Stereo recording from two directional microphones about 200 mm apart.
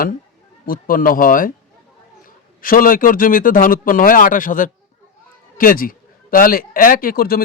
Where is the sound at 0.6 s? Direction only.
45° left (ahead or behind).